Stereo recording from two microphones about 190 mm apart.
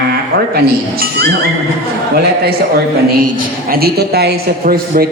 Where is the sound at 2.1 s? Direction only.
55° right (ahead or behind).